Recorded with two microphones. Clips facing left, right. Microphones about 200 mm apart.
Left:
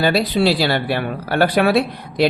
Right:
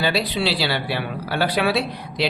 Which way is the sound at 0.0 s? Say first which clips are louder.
Left 6 dB; 45° left (ahead or behind).